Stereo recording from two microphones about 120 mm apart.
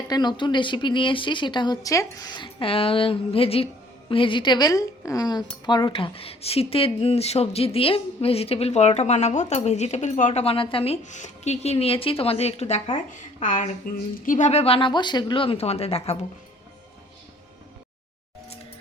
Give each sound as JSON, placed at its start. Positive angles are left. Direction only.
{"t": 0.1, "sound": "speech", "side_deg": 40}
{"t": 10.4, "sound": "a woman's voice", "side_deg": 50}
{"t": 11.0, "sound": "speech", "side_deg": 80}
{"t": 13.4, "sound": "a woman's voice", "side_deg": 90}